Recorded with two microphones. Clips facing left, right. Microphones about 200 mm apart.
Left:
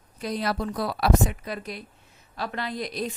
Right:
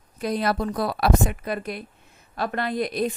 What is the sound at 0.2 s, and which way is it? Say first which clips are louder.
A woman's voice: right 4 dB; 55° right (ahead or behind).